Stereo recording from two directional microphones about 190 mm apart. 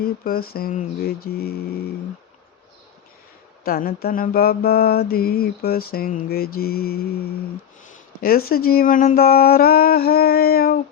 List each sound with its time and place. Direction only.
0.0 s mantra: 50° left (ahead or behind)
3.6 s mantra: 50° left (ahead or behind)
8.2 s mantra: 50° left (ahead or behind)